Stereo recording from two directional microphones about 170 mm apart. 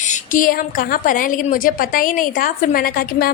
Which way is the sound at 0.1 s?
50° left (ahead or behind).